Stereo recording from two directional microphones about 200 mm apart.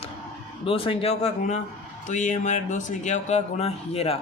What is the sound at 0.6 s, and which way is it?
Speech, 30° left (ahead or behind).